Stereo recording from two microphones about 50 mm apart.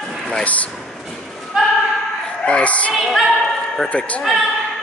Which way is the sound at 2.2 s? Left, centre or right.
Left.